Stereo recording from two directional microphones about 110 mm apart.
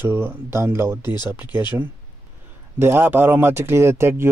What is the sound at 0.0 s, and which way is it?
A man's voice, 20° right (ahead or behind).